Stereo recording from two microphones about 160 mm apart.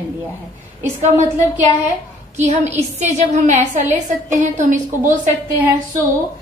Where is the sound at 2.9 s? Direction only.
45° right (ahead or behind).